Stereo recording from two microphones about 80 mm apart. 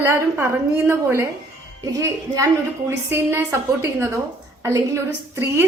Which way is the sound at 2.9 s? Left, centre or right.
Right.